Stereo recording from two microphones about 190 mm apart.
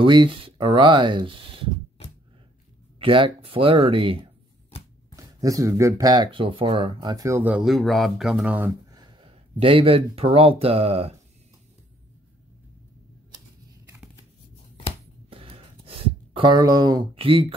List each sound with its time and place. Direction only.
0.0 s speech: 25° right (ahead or behind)
3.0 s speech: 25° right (ahead or behind)
5.1 s speech: 15° right (ahead or behind)
9.0 s speech: 30° right (ahead or behind)
13.8 s scissors: 10° right (ahead or behind)
15.2 s a sound: 30° right (ahead or behind)